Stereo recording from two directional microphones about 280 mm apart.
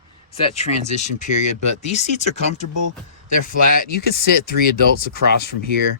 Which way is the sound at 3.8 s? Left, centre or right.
Left.